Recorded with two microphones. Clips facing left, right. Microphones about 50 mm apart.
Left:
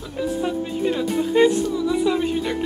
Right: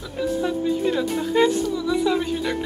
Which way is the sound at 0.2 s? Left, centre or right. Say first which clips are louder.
Right 1 dB; centre.